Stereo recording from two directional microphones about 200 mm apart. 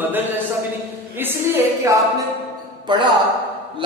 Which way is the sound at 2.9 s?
25° right (ahead or behind).